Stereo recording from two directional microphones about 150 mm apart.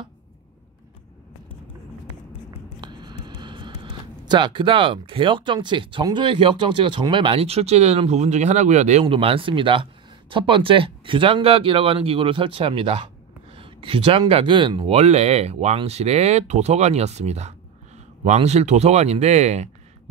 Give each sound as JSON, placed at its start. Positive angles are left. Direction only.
{"t": 2.8, "sound": "speech", "side_deg": -30}
{"t": 9.0, "sound": "speech", "side_deg": -35}